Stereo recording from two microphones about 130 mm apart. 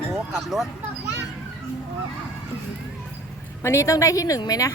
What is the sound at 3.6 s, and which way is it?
Speech, 20° left (ahead or behind).